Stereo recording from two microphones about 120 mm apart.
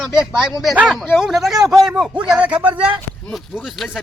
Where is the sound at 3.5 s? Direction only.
Centre (ahead or behind).